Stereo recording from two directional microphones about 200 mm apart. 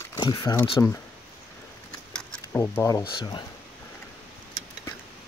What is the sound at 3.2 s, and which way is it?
Speech, 25° left (ahead or behind).